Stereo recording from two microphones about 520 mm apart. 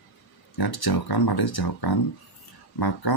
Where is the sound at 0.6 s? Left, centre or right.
Left.